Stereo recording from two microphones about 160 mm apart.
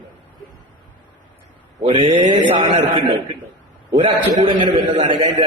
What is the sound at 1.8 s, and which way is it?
A man's voice, 30° right (ahead or behind).